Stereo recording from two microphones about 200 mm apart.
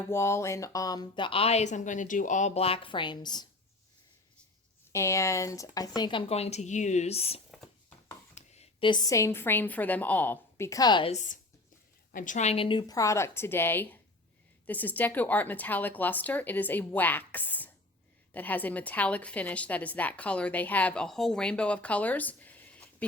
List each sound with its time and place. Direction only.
0.1 s speech: 15° left (ahead or behind)
4.9 s speech: 15° left (ahead or behind)
11.1 s a woman's voice: 35° left (ahead or behind); by 23.0 s 5° left (ahead or behind)